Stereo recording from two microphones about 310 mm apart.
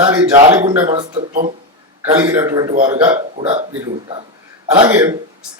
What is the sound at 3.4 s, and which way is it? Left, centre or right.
Speech, centre.